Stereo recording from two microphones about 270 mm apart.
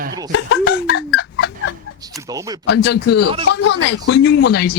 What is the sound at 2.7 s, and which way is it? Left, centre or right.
Speech, left.